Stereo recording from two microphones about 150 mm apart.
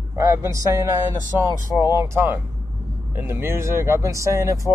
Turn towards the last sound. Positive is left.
turn(degrees=-20)  # may be behind; listen again after turning